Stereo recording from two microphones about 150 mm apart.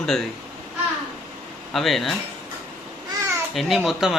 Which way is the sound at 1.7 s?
Centre (ahead or behind).